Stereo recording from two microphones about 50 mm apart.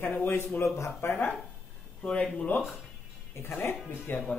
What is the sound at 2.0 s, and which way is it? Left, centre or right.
Speech, left.